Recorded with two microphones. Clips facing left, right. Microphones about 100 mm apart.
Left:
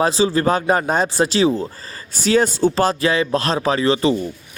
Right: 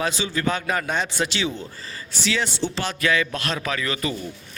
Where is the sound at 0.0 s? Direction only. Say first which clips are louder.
Left 8 dB; 35° left (ahead or behind).